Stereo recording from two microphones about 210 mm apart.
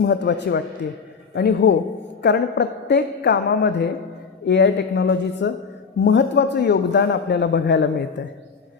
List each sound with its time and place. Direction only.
0.0 s a man's voice: 55° left (ahead or behind)